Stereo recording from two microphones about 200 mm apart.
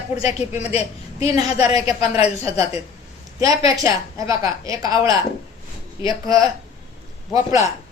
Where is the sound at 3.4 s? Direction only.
15° right (ahead or behind).